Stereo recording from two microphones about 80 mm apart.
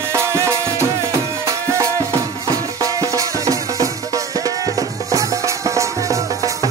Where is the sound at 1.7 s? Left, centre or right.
Right.